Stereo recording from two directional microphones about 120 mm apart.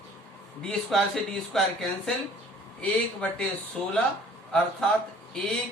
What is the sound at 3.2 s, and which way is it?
Speech, 10° left (ahead or behind).